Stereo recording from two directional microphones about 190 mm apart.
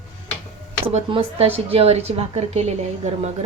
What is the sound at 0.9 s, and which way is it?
A woman's voice, 30° right (ahead or behind).